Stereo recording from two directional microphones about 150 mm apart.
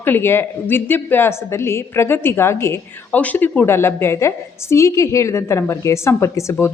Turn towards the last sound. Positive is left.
turn(degrees=20)  # may be behind; listen again after turning